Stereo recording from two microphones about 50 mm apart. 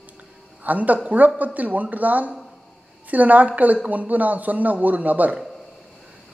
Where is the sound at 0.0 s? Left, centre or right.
Right.